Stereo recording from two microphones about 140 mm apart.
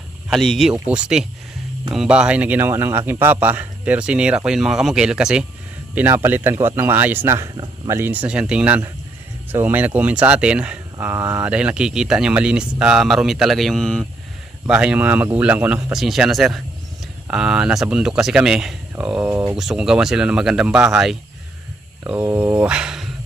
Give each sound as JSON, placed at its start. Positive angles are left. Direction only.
{"t": 0.3, "sound": "speech", "side_deg": 0}
{"t": 14.7, "sound": "speech", "side_deg": -5}
{"t": 22.2, "sound": "speech", "side_deg": -15}